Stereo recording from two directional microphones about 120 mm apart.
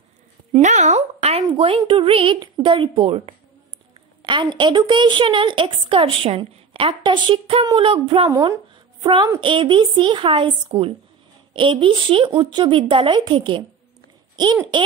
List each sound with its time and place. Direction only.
0.6 s speech: 75° right (ahead or behind)
1.4 s a woman's voice: 50° right (ahead or behind)
4.2 s a woman's voice: 40° right (ahead or behind)
8.3 s a woman's voice: 30° right (ahead or behind)
14.3 s a sound: 40° right (ahead or behind)